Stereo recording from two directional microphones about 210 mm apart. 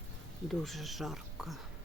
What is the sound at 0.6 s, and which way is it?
Speech, centre (ahead or behind).